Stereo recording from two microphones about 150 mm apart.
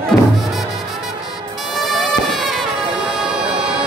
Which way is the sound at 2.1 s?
Centre (ahead or behind).